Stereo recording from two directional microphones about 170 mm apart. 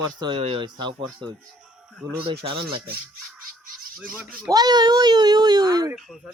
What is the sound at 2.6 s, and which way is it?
Speech, 65° right (ahead or behind).